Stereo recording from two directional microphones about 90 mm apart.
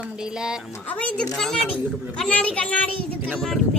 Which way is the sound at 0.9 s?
15° left (ahead or behind).